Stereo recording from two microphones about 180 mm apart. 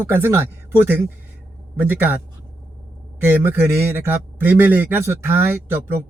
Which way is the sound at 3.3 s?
10° right (ahead or behind).